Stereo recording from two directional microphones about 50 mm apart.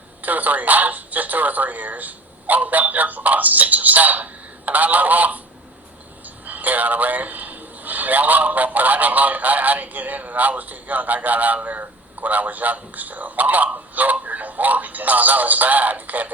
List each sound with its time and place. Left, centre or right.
0.2 s a man's voice: right